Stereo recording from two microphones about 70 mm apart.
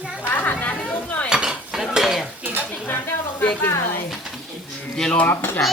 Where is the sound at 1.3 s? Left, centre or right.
Centre.